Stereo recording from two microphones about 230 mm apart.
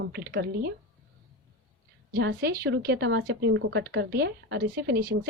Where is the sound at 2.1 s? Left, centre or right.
Right.